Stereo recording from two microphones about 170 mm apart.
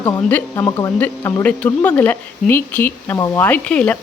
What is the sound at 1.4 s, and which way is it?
Speech, 10° left (ahead or behind).